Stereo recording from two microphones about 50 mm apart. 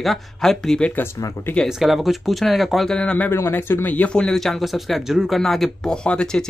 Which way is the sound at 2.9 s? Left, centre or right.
Left.